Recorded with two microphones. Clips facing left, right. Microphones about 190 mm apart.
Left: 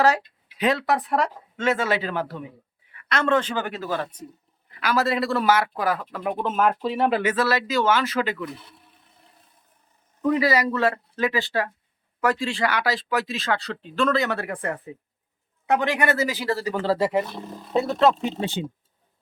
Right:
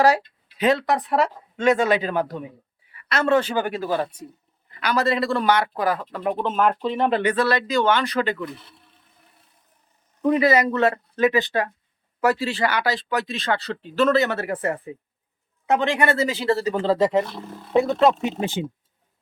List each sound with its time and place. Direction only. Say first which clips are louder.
0.6 s a man's voice: right 2 dB; centre (ahead or behind)
1.5 s a man's voice: right 5 dB; 15° right (ahead or behind)
3.1 s a man's voice: right 2 dB; 5° right (ahead or behind)
4.8 s a man's voice: right 1 dB; centre (ahead or behind)
10.2 s speech: right 3 dB; 25° right (ahead or behind)
12.2 s a man's voice: right 2 dB; 10° right (ahead or behind)
15.6 s speech: right 1 dB; 25° right (ahead or behind)